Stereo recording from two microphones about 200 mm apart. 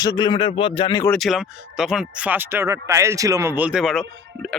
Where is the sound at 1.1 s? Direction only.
Centre (ahead or behind).